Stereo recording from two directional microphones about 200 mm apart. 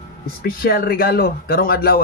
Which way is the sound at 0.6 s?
45° left (ahead or behind).